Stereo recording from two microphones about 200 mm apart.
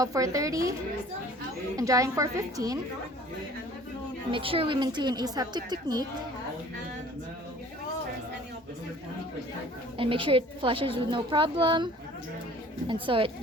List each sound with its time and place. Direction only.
0.0 s a woman's voice: 15° right (ahead or behind)
1.7 s a woman's voice: 15° right (ahead or behind)
4.3 s a woman's voice: 25° right (ahead or behind)
10.0 s a woman's voice: 25° right (ahead or behind)
12.9 s a woman's voice: 25° right (ahead or behind)